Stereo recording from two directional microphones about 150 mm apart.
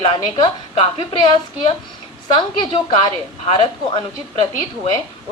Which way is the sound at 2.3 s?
35° left (ahead or behind).